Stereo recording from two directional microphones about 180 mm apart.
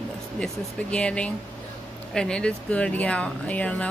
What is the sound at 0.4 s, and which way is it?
Speech, 5° left (ahead or behind).